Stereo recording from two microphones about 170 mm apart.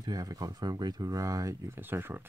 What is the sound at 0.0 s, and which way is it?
Speech, 20° right (ahead or behind).